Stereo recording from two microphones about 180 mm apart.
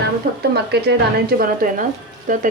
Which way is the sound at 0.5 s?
65° right (ahead or behind).